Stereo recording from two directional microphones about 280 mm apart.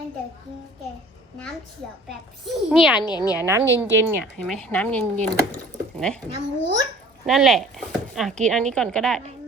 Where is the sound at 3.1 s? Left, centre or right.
Centre.